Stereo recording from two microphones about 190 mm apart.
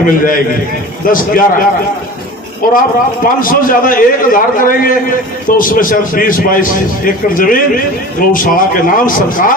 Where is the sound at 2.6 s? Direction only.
45° left (ahead or behind).